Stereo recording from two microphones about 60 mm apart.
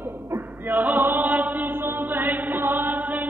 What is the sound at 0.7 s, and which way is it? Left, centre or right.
Chant, right.